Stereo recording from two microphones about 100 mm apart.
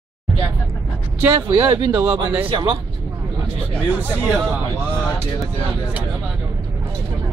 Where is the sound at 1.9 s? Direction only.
20° right (ahead or behind).